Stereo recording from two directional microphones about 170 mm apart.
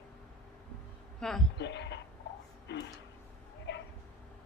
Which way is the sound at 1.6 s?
90° left.